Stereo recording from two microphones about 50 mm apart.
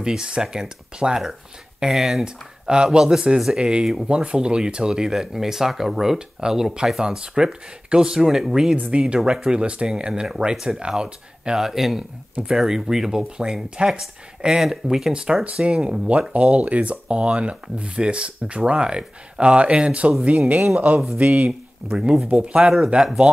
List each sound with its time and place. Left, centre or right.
0.0 s speech: centre
2.2 s speech: centre
4.0 s speech: right
8.7 s speech: right
9.0 s speech: centre
16.3 s a man's voice: right